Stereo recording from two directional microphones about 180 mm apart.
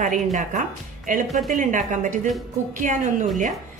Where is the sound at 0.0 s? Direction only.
45° right (ahead or behind).